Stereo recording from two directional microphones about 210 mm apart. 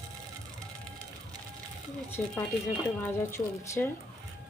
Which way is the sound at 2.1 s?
10° left (ahead or behind).